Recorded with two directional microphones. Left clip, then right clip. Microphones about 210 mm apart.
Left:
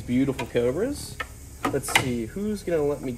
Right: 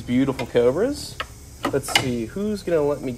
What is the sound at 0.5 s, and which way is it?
Speech, 30° right (ahead or behind).